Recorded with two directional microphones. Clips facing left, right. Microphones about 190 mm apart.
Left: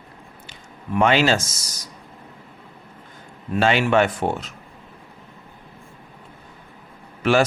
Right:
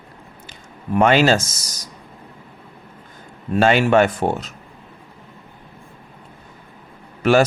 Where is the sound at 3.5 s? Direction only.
45° right (ahead or behind).